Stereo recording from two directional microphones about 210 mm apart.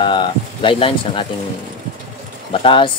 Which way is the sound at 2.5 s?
25° left (ahead or behind).